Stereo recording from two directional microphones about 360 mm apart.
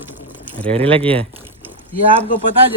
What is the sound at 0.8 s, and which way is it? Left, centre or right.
Speech, centre.